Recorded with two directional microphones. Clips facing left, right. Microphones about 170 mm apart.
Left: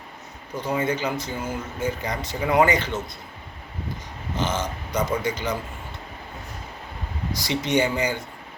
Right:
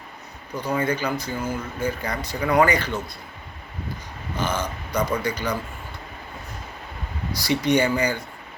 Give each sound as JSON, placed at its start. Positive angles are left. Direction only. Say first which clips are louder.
{"t": 0.5, "sound": "speech", "louder": "right 1 dB", "side_deg": 20}
{"t": 4.4, "sound": "speech", "louder": "even", "side_deg": 20}
{"t": 7.3, "sound": "speech", "louder": "right 2 dB", "side_deg": 20}